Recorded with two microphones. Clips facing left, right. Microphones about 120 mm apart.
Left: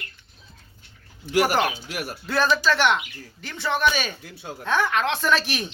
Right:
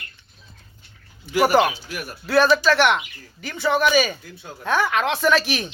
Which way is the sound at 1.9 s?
75° left (ahead or behind).